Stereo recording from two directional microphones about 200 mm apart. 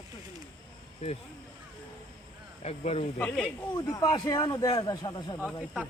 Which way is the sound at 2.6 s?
30° left (ahead or behind).